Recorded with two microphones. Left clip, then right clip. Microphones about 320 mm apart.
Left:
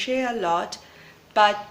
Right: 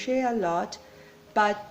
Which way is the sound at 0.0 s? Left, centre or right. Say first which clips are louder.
Left 2 dB; right.